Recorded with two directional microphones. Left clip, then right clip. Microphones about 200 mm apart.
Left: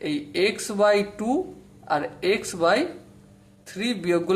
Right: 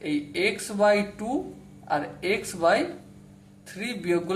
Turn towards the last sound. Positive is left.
turn(degrees=40)  # may be behind; listen again after turning